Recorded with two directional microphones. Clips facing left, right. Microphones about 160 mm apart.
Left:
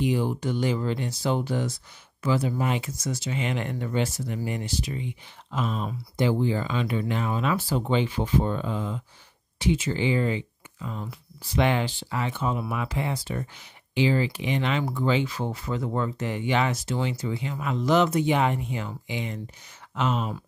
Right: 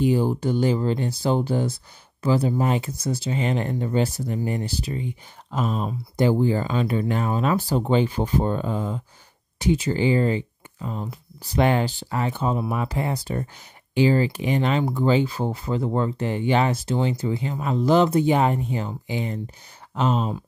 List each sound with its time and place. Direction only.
0.0 s speech: 35° right (ahead or behind)